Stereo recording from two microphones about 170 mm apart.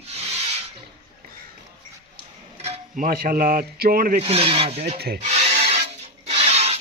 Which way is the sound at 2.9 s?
55° right (ahead or behind).